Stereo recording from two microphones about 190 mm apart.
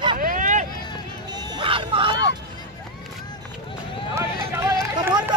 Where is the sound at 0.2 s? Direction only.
45° right (ahead or behind).